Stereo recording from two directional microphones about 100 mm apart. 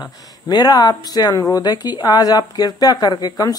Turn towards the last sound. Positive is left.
turn(degrees=40)  # may be behind; listen again after turning